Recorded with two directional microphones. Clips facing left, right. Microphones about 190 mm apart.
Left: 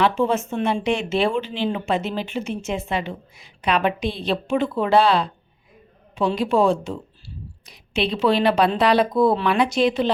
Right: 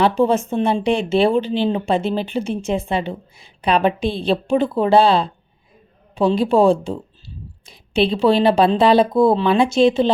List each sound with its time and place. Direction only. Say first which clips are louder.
0.0 s speech: right 4 dB; 35° right (ahead or behind)